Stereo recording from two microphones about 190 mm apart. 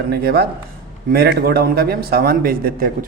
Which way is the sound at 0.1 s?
55° right (ahead or behind).